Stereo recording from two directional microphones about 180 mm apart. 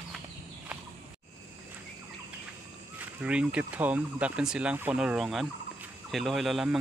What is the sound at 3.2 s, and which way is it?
Speech, 5° right (ahead or behind).